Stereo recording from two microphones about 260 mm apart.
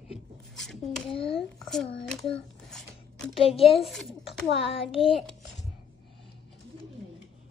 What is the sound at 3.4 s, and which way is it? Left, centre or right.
Speech, left.